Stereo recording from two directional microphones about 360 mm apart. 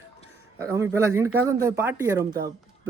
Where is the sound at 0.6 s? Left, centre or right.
Centre.